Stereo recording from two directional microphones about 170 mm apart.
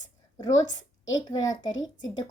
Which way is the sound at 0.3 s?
25° left (ahead or behind).